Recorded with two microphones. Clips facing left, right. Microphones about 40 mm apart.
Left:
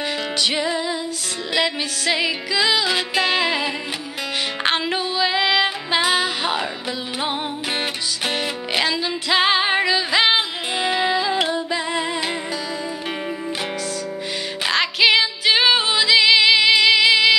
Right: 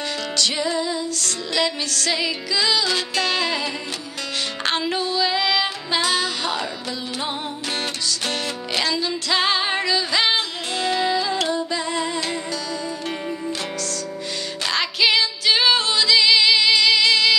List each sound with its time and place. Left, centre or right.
0.4 s music: centre
4.7 s music: centre
8.3 s music: centre
14.7 s music: centre